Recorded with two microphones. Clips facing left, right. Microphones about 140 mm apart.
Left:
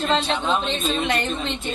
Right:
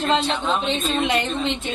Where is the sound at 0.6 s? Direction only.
15° right (ahead or behind).